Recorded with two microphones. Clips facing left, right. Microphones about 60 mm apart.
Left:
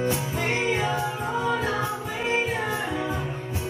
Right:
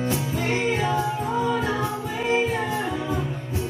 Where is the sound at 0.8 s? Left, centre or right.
Centre.